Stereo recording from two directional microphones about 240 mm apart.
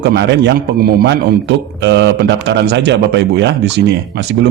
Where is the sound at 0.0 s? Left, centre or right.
Right.